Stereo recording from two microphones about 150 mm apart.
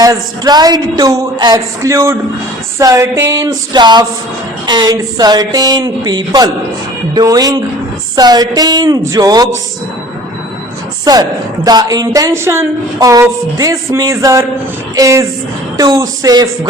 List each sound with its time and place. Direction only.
0.0 s a woman's voice: 25° right (ahead or behind)
11.0 s a woman's voice: 25° right (ahead or behind)